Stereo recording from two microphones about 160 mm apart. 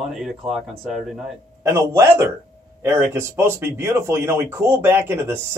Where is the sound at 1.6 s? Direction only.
15° right (ahead or behind).